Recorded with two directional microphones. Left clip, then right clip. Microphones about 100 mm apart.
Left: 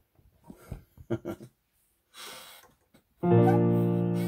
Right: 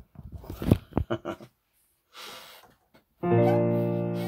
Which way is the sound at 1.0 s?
45° left (ahead or behind).